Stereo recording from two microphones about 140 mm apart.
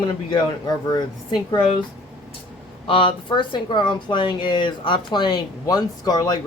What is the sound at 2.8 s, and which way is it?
Speech, 40° left (ahead or behind).